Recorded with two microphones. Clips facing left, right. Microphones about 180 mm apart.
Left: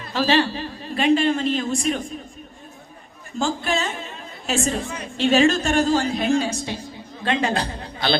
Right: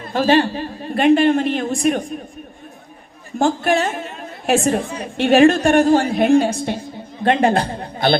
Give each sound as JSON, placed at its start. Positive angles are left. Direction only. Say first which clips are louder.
{"t": 0.0, "sound": "a woman's voice", "louder": "right 4 dB", "side_deg": -50}
{"t": 3.3, "sound": "a woman's voice", "louder": "right 6 dB", "side_deg": -60}